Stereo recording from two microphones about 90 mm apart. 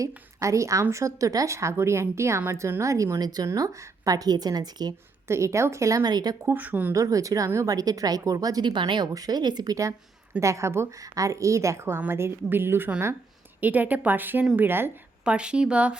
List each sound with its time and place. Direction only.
0.0 s a woman's voice: 35° right (ahead or behind)
5.3 s a woman's voice: 35° right (ahead or behind); by 6.5 s 50° right (ahead or behind)
6.5 s speech: 20° right (ahead or behind)
6.9 s a woman's voice: 40° right (ahead or behind)
8.7 s speech: 60° right (ahead or behind)
9.1 s a woman's voice: 45° right (ahead or behind); by 14.8 s 25° right (ahead or behind)
15.2 s speech: 10° right (ahead or behind)